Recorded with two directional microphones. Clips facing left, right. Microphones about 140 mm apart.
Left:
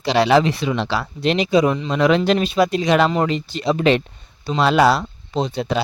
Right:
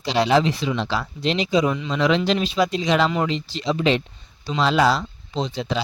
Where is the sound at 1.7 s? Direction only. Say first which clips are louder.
Left 4 dB; 45° left (ahead or behind).